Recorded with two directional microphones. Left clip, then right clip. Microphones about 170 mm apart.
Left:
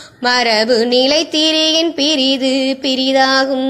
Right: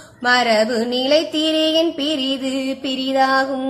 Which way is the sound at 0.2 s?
30° left (ahead or behind).